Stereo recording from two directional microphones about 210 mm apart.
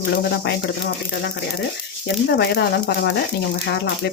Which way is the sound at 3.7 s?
55° left (ahead or behind).